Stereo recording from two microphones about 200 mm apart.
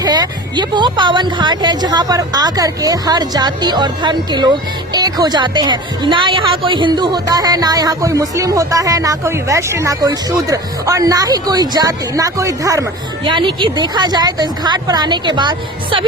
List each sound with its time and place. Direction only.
0.0 s a woman's voice: 20° right (ahead or behind)